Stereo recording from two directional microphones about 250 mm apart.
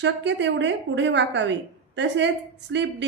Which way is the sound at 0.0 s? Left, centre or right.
Right.